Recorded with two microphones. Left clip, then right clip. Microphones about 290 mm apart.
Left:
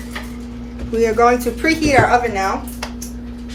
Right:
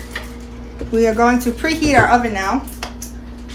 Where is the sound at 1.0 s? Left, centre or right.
Centre.